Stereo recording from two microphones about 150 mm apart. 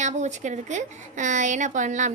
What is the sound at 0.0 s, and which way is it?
A woman's voice, 55° right (ahead or behind).